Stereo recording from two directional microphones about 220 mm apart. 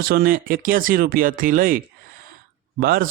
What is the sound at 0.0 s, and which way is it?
Speech, 45° right (ahead or behind).